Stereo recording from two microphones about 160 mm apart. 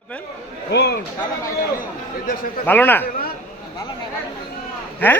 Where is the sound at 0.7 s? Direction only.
90° left.